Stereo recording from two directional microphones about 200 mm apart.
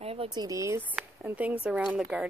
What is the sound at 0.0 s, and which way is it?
Speech, 30° right (ahead or behind).